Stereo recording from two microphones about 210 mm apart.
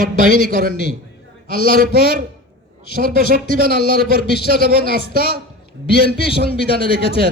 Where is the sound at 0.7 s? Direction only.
55° left (ahead or behind).